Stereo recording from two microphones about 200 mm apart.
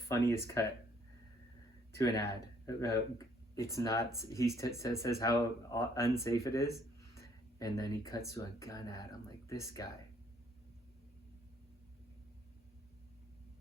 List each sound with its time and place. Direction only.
0.1 s speech: 15° left (ahead or behind)
1.9 s speech: 15° left (ahead or behind)